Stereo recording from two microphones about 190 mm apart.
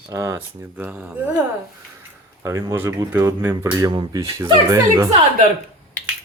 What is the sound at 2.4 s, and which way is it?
Speech, 15° right (ahead or behind).